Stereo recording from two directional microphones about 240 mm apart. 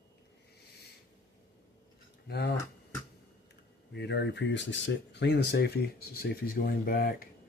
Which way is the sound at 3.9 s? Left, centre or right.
Left.